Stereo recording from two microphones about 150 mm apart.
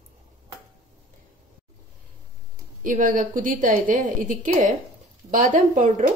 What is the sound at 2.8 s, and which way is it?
A woman's voice, 60° right (ahead or behind).